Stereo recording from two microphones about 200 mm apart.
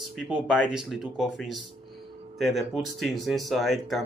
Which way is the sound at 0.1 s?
5° right (ahead or behind).